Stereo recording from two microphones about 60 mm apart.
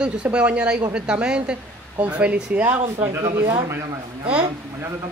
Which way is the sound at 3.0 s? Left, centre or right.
Right.